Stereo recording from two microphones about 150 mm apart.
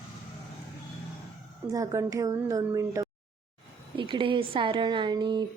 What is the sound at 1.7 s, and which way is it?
A woman's voice, 20° right (ahead or behind).